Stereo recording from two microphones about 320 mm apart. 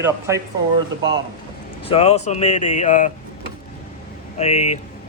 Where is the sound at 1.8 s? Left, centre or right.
Centre.